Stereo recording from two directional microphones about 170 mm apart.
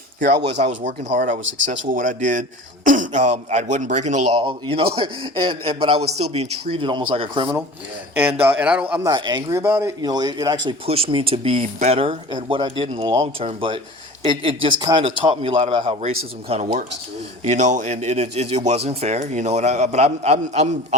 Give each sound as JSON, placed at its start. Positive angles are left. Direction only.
{"t": 0.6, "sound": "a man's voice", "side_deg": -40}
{"t": 4.4, "sound": "speech", "side_deg": -30}
{"t": 8.4, "sound": "speech", "side_deg": -10}
{"t": 9.1, "sound": "speech", "side_deg": -25}
{"t": 10.7, "sound": "speech", "side_deg": -35}